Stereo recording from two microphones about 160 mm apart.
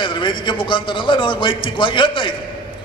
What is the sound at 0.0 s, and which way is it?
A man's voice, 30° left (ahead or behind).